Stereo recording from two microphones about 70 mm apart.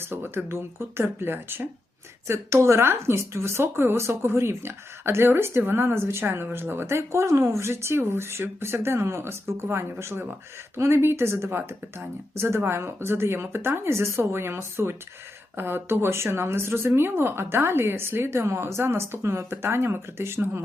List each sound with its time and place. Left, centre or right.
0.0 s speech: right